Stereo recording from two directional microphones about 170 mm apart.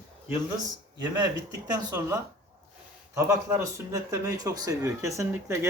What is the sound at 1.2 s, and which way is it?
A man's voice, 20° right (ahead or behind).